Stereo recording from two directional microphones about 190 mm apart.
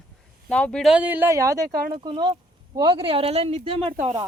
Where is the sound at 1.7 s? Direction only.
50° right (ahead or behind).